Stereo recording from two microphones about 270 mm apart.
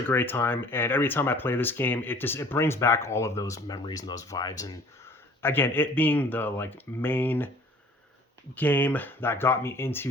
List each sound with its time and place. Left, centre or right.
0.1 s speech: centre
8.5 s speech: centre